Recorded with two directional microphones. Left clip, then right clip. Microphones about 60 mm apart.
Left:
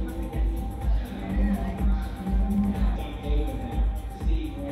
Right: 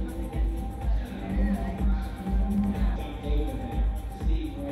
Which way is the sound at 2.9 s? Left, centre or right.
Right.